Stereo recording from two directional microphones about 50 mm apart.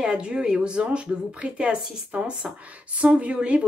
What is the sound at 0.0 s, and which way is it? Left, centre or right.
Speech, centre.